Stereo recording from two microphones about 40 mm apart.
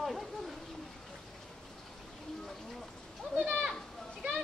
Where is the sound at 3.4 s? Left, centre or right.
Right.